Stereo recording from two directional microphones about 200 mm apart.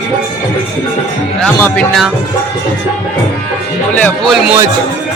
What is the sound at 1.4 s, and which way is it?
Speech, 5° left (ahead or behind).